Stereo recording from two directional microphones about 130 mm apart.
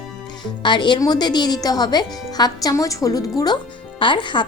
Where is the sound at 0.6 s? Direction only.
35° left (ahead or behind).